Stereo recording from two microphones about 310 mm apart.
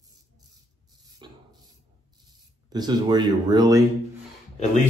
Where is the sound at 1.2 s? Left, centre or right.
Centre.